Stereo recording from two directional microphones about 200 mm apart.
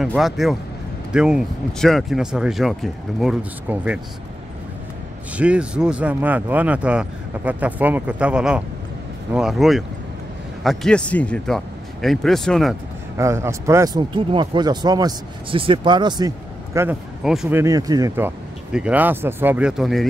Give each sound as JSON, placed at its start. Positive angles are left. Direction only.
{"t": 0.0, "sound": "speech", "side_deg": 0}
{"t": 5.4, "sound": "speech", "side_deg": -5}
{"t": 13.2, "sound": "speech", "side_deg": -15}
{"t": 17.2, "sound": "speech", "side_deg": 0}